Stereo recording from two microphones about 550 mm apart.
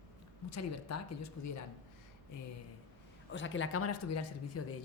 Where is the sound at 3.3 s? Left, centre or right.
Left.